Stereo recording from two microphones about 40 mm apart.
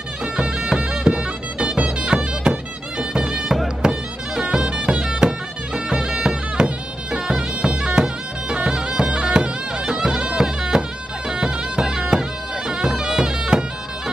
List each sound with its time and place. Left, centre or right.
0.2 s music: right
8.5 s bagpipes: right